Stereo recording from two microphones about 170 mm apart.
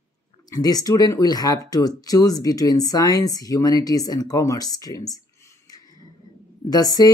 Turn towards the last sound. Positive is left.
turn(degrees=20)  # may be behind; listen again after turning